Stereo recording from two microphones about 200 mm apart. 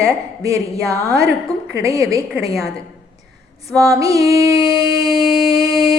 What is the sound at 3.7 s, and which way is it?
A woman's voice, 15° right (ahead or behind).